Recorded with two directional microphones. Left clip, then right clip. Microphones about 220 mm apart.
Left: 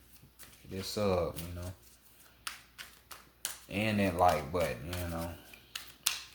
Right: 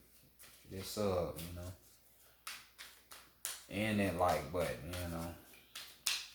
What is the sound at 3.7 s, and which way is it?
Speech, 40° left (ahead or behind).